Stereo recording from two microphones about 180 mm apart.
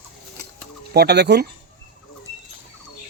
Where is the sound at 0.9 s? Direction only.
65° right (ahead or behind).